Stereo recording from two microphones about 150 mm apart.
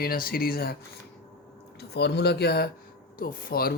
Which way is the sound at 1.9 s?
90° left.